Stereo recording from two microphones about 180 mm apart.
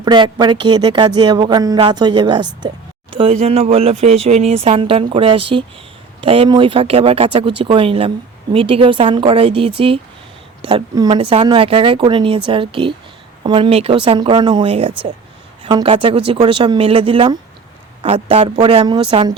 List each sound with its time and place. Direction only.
0.0 s speech: 25° right (ahead or behind)
2.6 s a sound: 25° right (ahead or behind)
3.4 s speech: 35° right (ahead or behind)
11.2 s speech: 30° right (ahead or behind)